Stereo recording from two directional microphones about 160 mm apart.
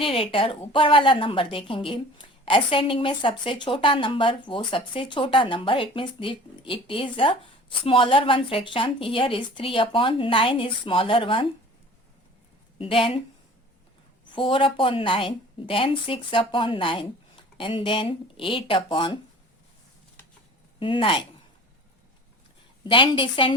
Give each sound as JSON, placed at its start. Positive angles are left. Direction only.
{"t": 0.0, "sound": "a woman's voice", "side_deg": 35}
{"t": 12.8, "sound": "a woman's voice", "side_deg": 35}
{"t": 14.3, "sound": "a woman's voice", "side_deg": 30}
{"t": 20.7, "sound": "a woman's voice", "side_deg": 35}
{"t": 22.8, "sound": "a woman's voice", "side_deg": 30}